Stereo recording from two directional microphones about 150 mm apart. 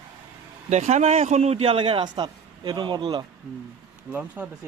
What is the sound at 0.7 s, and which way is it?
A man's voice, 50° right (ahead or behind).